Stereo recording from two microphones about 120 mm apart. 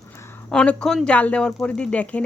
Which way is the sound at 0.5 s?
10° left (ahead or behind).